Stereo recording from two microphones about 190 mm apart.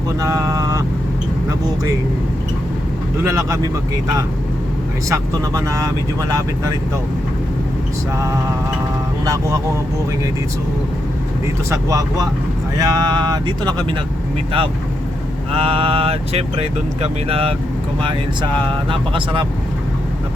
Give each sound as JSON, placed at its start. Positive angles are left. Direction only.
{"t": 0.2, "sound": "vehicle", "side_deg": -15}
{"t": 5.0, "sound": "speech", "side_deg": -15}
{"t": 9.2, "sound": "speech", "side_deg": -15}
{"t": 11.7, "sound": "speech", "side_deg": -15}
{"t": 15.5, "sound": "speech", "side_deg": -30}
{"t": 18.5, "sound": "speech", "side_deg": -25}